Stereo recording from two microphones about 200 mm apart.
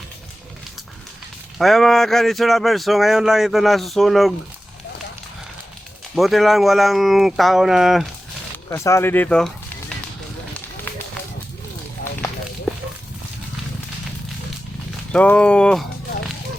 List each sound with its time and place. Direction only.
1.5 s speech: centre (ahead or behind)
6.1 s speech: centre (ahead or behind)
8.7 s speech: 15° left (ahead or behind)
15.1 s speech: 5° left (ahead or behind)